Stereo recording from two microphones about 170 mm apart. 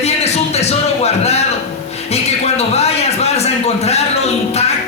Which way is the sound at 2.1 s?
40° left (ahead or behind).